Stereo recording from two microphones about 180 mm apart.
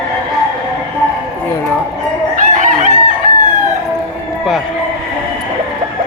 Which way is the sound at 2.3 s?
45° right (ahead or behind).